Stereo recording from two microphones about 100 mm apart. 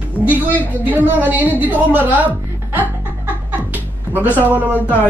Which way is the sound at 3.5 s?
15° right (ahead or behind).